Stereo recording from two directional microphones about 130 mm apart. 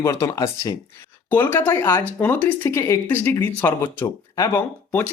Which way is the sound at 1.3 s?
15° left (ahead or behind).